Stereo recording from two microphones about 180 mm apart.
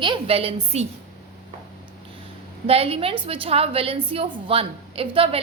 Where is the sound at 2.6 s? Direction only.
35° right (ahead or behind).